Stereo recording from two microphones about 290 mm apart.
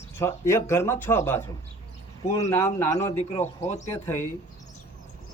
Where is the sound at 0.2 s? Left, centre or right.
Centre.